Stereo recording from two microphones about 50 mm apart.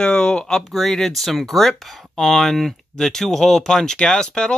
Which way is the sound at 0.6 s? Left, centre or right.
Centre.